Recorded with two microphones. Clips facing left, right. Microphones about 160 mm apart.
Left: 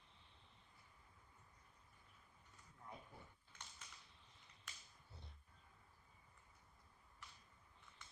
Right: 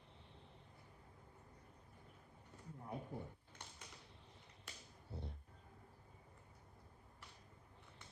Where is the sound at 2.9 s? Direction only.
45° right (ahead or behind).